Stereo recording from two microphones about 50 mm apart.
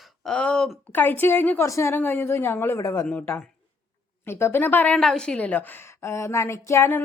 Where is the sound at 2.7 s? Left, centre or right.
Left.